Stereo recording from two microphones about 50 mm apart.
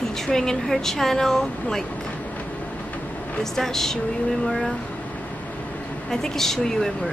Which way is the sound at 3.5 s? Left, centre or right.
Centre.